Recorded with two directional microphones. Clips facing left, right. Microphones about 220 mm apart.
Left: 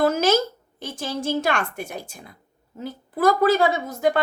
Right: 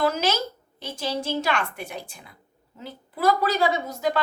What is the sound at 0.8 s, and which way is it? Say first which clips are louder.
A woman's voice: even; 50° left (ahead or behind).